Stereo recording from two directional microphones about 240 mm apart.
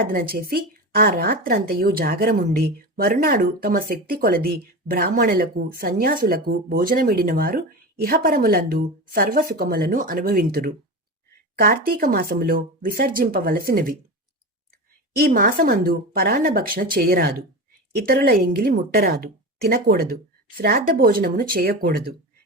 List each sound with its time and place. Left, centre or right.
0.0 s a woman's voice: right
15.2 s a woman's voice: right